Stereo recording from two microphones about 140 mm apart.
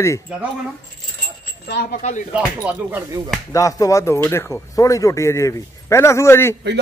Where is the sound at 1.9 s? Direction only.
60° left (ahead or behind).